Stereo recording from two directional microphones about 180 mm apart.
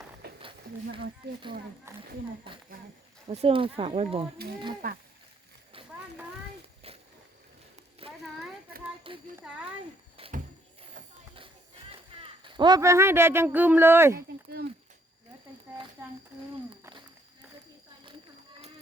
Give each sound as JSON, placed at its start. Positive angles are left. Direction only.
{"t": 0.2, "sound": "a sound", "side_deg": -65}
{"t": 1.9, "sound": "speech", "side_deg": -15}
{"t": 2.5, "sound": "speech", "side_deg": -30}
{"t": 6.8, "sound": "a sound", "side_deg": -35}
{"t": 9.1, "sound": "speech", "side_deg": -30}
{"t": 9.5, "sound": "speech", "side_deg": -5}
{"t": 12.1, "sound": "speech", "side_deg": -30}
{"t": 14.2, "sound": "speech", "side_deg": -60}
{"t": 16.0, "sound": "speech", "side_deg": -15}